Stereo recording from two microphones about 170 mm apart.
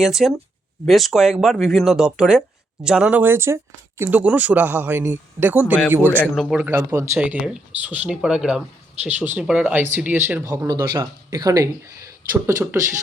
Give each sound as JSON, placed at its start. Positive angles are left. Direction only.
{"t": 0.0, "sound": "speech", "side_deg": -5}
{"t": 6.1, "sound": "speech", "side_deg": 5}